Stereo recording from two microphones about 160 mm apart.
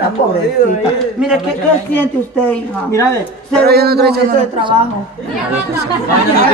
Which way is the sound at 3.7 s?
85° right.